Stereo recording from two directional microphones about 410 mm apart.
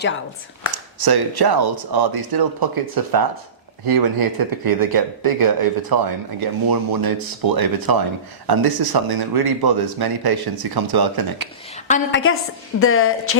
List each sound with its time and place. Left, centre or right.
1.0 s speech: right
11.9 s a woman's voice: centre
12.8 s a woman's voice: left